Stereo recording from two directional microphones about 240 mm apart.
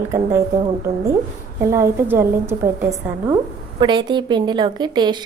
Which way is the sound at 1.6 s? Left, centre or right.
Centre.